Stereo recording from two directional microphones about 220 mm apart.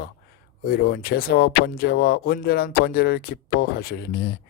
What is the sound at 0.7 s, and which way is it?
A man's voice, 45° left (ahead or behind).